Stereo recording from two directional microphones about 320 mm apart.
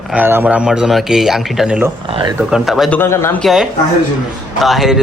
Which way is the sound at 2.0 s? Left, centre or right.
Centre.